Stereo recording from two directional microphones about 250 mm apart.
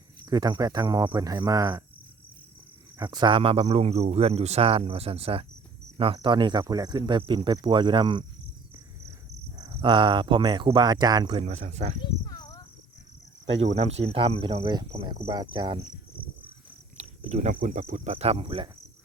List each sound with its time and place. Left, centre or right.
0.3 s speech: centre
3.0 s speech: centre
9.6 s speech: centre
12.3 s a sound: centre
13.6 s speech: right
17.0 s speech: right